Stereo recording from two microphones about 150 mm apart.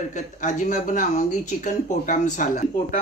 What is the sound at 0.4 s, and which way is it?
Speech, 55° left (ahead or behind).